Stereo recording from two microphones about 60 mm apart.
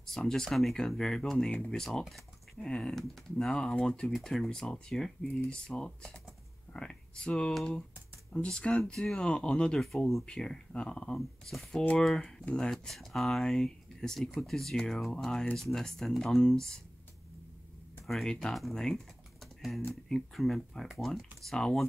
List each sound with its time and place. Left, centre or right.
0.0 s speech: centre
2.0 s a sound: centre
2.7 s speech: centre
11.1 s speech: centre
18.0 s speech: centre